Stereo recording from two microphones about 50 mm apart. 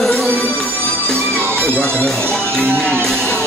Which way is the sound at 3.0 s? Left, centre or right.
Centre.